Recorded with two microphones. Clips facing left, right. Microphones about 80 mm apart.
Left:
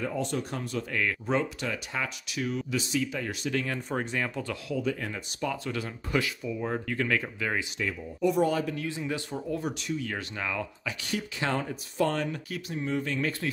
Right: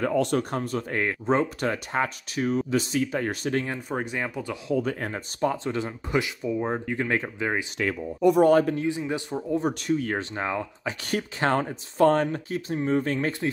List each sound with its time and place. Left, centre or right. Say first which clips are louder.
0.0 s speech: right 7 dB; right
3.6 s speech: right 2 dB; centre
4.7 s speech: right 4 dB; right
5.6 s speech: right 5 dB; right
7.8 s speech: right 7 dB; right
8.7 s speech: right 5 dB; right
9.7 s speech: right 7 dB; right
10.1 s speech: right 5 dB; right
11.1 s speech: right 6 dB; right